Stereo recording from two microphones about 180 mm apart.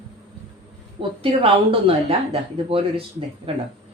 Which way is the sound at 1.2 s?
30° right (ahead or behind).